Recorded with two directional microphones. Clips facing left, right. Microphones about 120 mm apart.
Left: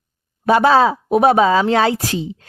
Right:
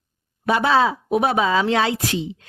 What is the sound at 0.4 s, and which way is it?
A woman's voice, 40° left (ahead or behind).